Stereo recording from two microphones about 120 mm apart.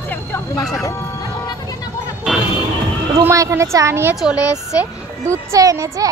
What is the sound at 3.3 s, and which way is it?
Speech, 25° right (ahead or behind).